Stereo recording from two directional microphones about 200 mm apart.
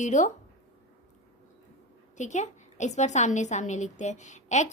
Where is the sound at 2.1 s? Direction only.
35° left (ahead or behind).